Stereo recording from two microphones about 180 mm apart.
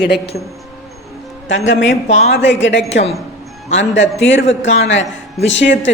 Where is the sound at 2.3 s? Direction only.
90° left.